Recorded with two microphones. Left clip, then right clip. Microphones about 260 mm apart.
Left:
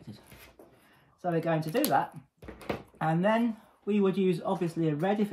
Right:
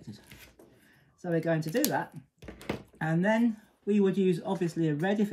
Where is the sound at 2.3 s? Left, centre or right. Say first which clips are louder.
Left 1 dB; centre.